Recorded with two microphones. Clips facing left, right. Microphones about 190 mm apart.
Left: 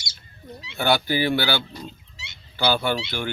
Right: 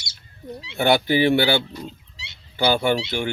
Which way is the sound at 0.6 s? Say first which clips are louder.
Right 3 dB; 25° right (ahead or behind).